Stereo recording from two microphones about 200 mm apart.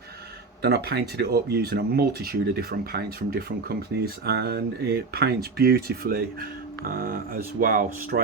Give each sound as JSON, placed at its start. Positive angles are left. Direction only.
{"t": 0.6, "sound": "speech", "side_deg": -55}